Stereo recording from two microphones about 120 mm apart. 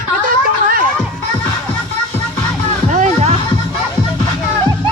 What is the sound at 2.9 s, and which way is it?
Music, 90° right.